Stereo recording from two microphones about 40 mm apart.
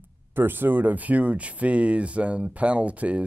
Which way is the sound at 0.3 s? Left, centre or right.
Right.